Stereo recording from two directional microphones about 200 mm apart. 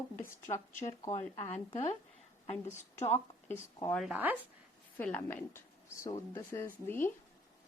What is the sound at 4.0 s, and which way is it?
Speech, 5° right (ahead or behind).